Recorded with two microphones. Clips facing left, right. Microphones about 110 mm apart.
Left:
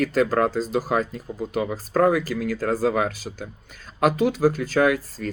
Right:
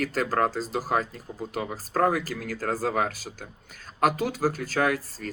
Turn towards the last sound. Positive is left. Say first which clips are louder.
# left 5 dB
turn(degrees=-40)  # may be behind; listen again after turning